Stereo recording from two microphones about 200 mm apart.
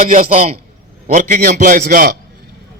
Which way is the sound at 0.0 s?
40° right (ahead or behind).